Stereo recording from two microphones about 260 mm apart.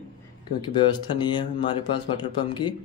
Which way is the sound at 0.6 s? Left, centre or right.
Centre.